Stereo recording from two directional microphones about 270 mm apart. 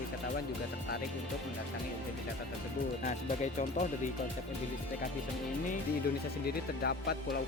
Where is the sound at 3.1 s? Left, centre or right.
Left.